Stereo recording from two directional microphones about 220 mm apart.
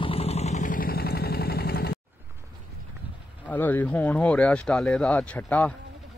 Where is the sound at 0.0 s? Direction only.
25° left (ahead or behind); by 2.0 s 45° left (ahead or behind).